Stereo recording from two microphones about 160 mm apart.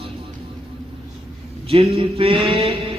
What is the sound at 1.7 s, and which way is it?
A man's voice, 35° right (ahead or behind).